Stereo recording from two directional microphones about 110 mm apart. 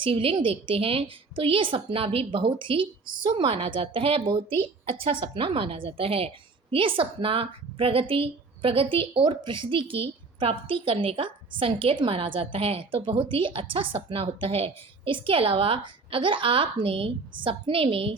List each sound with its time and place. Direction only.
0.0 s a woman's voice: 55° right (ahead or behind)